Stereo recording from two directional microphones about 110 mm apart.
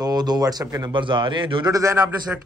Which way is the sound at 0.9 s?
45° right (ahead or behind).